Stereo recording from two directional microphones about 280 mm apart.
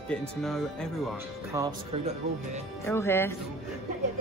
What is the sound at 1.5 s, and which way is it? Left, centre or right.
Speech, centre.